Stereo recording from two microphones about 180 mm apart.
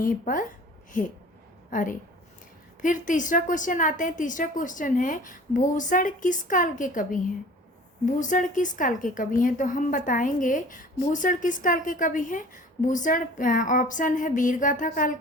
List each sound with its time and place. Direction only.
0.0 s a woman's voice: 50° left (ahead or behind)